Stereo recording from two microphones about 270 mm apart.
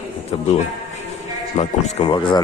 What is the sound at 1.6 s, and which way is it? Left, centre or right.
Speech, left.